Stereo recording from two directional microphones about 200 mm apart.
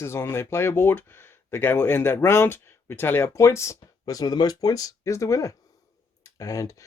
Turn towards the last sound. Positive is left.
turn(degrees=15)  # may be behind; listen again after turning